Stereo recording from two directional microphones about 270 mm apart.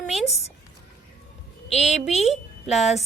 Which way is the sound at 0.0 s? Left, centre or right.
Centre.